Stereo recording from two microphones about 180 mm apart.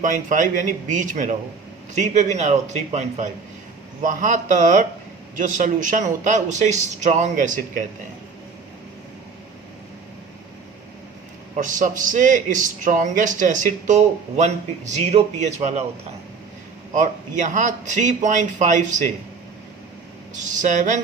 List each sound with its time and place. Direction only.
0.0 s a man's voice: 45° right (ahead or behind)
11.5 s a man's voice: 45° right (ahead or behind)
17.0 s a man's voice: 45° right (ahead or behind)
20.6 s a man's voice: 45° right (ahead or behind)